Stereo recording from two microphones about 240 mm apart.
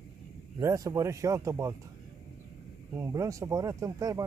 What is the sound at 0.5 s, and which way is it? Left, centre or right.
Speech, centre.